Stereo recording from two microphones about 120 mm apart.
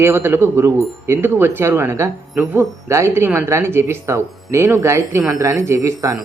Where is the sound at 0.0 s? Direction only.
20° right (ahead or behind).